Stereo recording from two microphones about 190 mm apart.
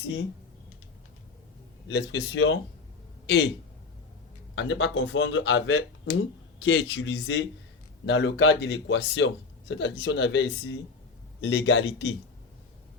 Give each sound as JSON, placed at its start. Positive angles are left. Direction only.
{"t": 1.9, "sound": "a man's voice", "side_deg": 65}
{"t": 4.5, "sound": "speech", "side_deg": 80}
{"t": 8.0, "sound": "a man's voice", "side_deg": 70}